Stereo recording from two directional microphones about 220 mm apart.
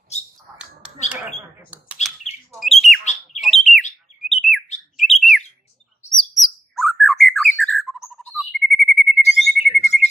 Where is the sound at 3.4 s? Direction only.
Centre (ahead or behind).